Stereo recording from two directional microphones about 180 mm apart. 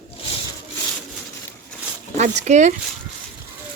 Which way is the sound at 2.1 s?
40° right (ahead or behind).